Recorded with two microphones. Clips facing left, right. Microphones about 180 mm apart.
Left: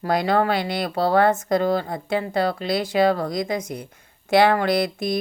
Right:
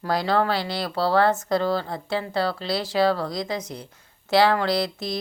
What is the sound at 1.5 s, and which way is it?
Speech, 15° left (ahead or behind).